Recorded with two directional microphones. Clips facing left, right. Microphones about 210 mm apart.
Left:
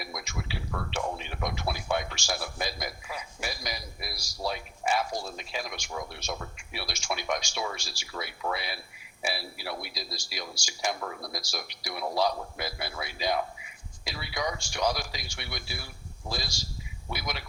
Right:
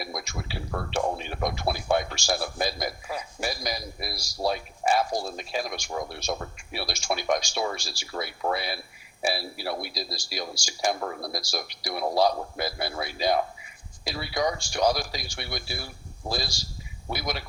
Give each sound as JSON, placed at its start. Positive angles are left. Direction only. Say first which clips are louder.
{"t": 0.0, "sound": "speech", "louder": "right 3 dB", "side_deg": -35}